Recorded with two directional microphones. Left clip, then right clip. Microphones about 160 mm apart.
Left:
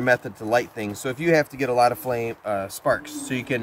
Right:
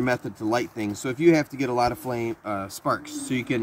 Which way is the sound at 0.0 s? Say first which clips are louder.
Left 4 dB; 15° left (ahead or behind).